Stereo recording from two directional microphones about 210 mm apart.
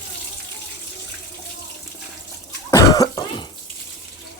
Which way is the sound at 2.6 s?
15° left (ahead or behind).